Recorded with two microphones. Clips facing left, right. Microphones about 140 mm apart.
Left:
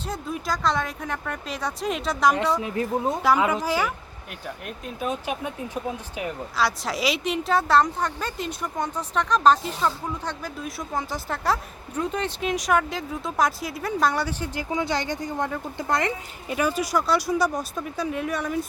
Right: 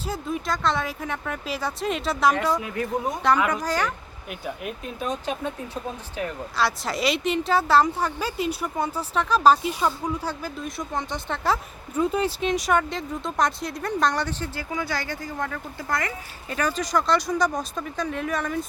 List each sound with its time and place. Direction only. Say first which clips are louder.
0.0 s a woman's voice: right 2 dB; centre (ahead or behind)
2.6 s speech: left 2 dB; 25° left (ahead or behind)
3.5 s speech: left 1 dB; 10° left (ahead or behind)
4.3 s speech: right 4 dB; 5° right (ahead or behind); by 6.3 s 15° left (ahead or behind)
6.6 s a woman's voice: even; centre (ahead or behind)
10.6 s a woman's voice: left 2 dB; centre (ahead or behind); by 16.1 s 20° left (ahead or behind)
16.5 s a woman's voice: left 1 dB; 10° left (ahead or behind)